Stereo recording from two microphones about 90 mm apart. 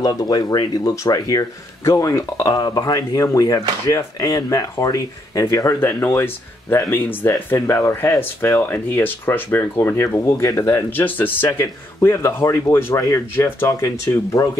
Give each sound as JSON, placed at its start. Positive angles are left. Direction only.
{"t": 0.0, "sound": "speech", "side_deg": 45}